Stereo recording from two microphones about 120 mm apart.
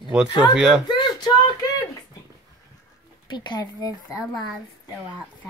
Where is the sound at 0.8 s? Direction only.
40° left (ahead or behind).